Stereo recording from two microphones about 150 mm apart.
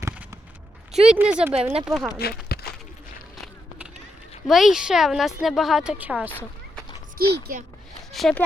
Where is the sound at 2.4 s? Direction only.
90° left.